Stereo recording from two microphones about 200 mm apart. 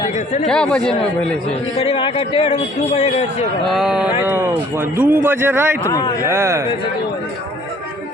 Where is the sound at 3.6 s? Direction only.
Centre (ahead or behind).